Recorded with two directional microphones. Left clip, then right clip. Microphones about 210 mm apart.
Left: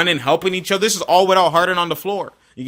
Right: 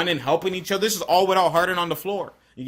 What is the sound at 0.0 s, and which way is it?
A man's voice, 45° left (ahead or behind).